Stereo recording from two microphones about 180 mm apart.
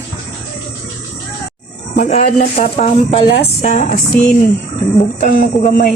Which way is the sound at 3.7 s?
40° left (ahead or behind).